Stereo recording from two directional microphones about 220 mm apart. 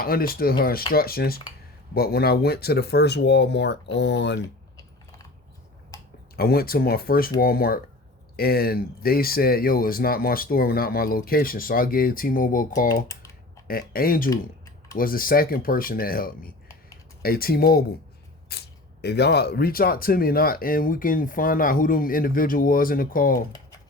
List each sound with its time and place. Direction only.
0.0 s speech: 40° left (ahead or behind)
5.9 s a sound: 15° left (ahead or behind)
6.3 s speech: 45° left (ahead or behind)